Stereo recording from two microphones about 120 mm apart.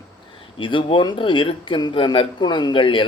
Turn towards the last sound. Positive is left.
turn(degrees=45)  # may be behind; listen again after turning